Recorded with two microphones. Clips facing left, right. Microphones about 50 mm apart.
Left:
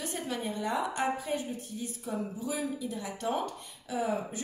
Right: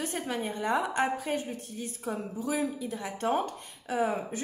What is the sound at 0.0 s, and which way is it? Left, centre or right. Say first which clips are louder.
A woman's voice: right 2 dB; right.